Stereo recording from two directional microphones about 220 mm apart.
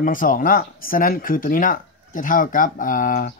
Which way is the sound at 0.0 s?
40° left (ahead or behind).